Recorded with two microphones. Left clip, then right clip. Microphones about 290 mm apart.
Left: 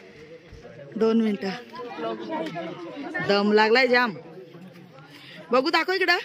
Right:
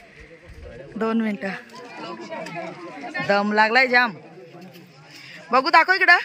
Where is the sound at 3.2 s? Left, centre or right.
Centre.